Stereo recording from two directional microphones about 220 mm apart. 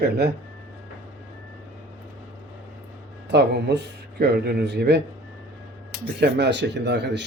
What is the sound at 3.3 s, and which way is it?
A man's voice, 50° right (ahead or behind).